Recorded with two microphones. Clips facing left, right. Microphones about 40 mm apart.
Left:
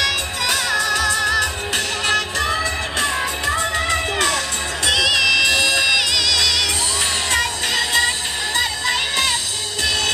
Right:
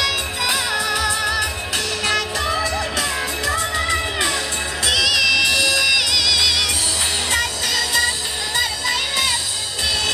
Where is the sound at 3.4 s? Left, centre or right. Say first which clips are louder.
Left 1 dB; left.